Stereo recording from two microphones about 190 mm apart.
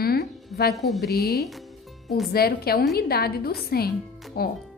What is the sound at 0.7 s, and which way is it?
Speech, centre (ahead or behind).